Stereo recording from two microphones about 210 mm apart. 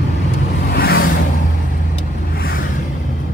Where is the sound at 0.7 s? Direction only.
45° left (ahead or behind).